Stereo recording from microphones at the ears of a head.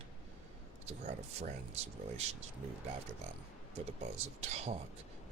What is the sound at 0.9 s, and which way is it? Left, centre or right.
Speech, right.